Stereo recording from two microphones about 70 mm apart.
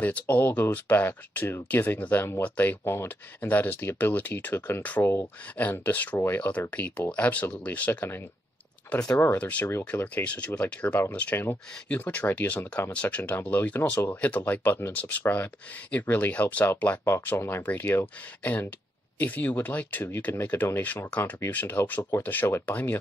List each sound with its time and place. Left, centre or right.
0.0 s speech: left
2.8 s speech: left
3.3 s speech: left
8.8 s speech: left
9.4 s speech: left
17.0 s speech: left
18.4 s speech: left
20.3 s speech: left
20.8 s speech: left